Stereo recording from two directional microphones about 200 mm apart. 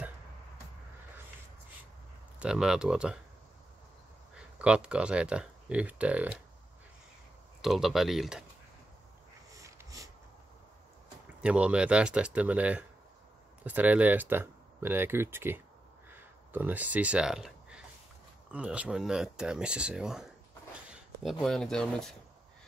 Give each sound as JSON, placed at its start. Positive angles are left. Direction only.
{"t": 2.3, "sound": "speech", "side_deg": -5}
{"t": 4.6, "sound": "speech", "side_deg": -5}
{"t": 7.6, "sound": "speech", "side_deg": 0}
{"t": 9.6, "sound": "a sound", "side_deg": -15}
{"t": 11.4, "sound": "speech", "side_deg": -5}
{"t": 16.1, "sound": "a sound", "side_deg": -10}
{"t": 18.5, "sound": "speech", "side_deg": -5}